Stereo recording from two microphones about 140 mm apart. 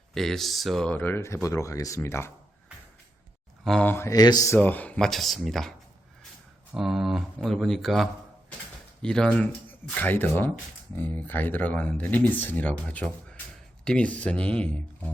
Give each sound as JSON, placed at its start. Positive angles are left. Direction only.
{"t": 0.1, "sound": "speech", "side_deg": 0}
{"t": 3.6, "sound": "speech", "side_deg": 5}
{"t": 3.9, "sound": "speech", "side_deg": 25}
{"t": 4.5, "sound": "speech", "side_deg": 10}
{"t": 6.7, "sound": "speech", "side_deg": 0}